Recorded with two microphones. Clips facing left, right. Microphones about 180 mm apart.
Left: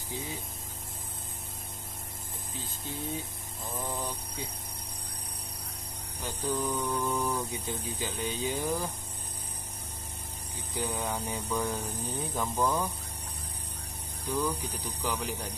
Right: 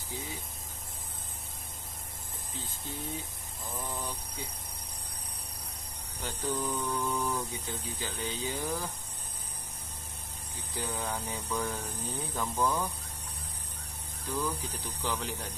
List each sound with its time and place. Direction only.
3.8 s speech: 20° left (ahead or behind)
6.2 s mantra: 15° left (ahead or behind)
7.3 s speech: 15° left (ahead or behind)
10.7 s speech: 15° left (ahead or behind)
14.2 s speech: 15° left (ahead or behind)